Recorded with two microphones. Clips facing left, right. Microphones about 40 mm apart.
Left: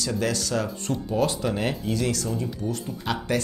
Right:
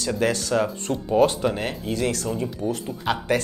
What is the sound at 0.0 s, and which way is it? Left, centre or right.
Speech, right.